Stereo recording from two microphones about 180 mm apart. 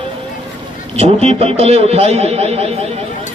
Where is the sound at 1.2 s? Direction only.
35° right (ahead or behind).